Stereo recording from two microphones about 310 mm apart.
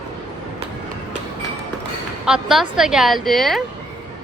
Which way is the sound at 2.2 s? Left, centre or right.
Centre.